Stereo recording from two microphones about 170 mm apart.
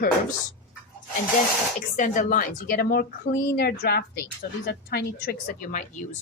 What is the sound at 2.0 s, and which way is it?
A woman's voice, 50° left (ahead or behind).